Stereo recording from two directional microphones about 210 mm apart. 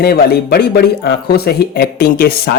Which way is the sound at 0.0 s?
50° left (ahead or behind).